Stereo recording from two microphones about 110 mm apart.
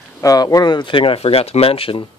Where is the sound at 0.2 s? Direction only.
35° left (ahead or behind).